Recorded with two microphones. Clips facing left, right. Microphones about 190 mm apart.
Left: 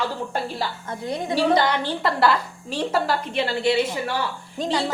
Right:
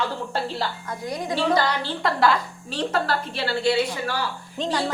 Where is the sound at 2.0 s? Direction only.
5° left (ahead or behind).